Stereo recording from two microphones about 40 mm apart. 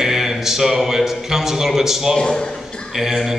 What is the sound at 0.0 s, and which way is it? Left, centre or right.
Speech, centre.